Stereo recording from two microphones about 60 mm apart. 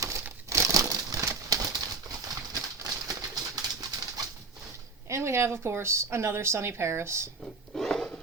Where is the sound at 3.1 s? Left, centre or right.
Right.